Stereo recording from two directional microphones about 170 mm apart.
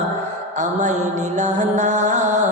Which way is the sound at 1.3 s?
45° right (ahead or behind).